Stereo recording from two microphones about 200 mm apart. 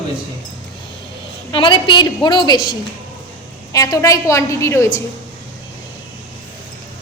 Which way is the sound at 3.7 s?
15° left (ahead or behind).